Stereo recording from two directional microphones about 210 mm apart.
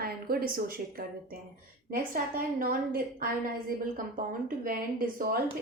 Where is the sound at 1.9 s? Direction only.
45° right (ahead or behind).